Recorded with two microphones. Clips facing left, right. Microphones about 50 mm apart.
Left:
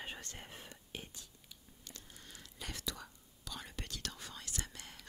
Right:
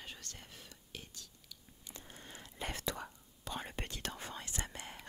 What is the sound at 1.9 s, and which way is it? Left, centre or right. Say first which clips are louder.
Whispering: right 5 dB; right.